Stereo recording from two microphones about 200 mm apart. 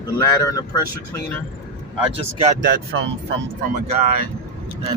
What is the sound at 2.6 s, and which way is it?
Speech, 55° right (ahead or behind).